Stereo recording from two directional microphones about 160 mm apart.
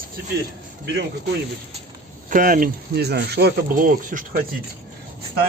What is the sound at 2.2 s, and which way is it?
Speech, 60° right (ahead or behind).